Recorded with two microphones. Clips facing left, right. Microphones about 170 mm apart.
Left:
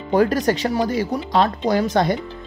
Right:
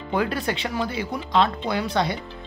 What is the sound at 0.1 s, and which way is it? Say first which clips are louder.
Speech: left 7 dB; 40° left (ahead or behind).